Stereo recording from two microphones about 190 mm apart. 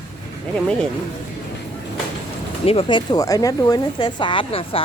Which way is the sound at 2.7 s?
30° left (ahead or behind).